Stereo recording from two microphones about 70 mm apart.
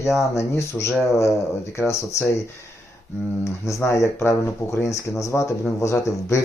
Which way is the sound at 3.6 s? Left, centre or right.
Left.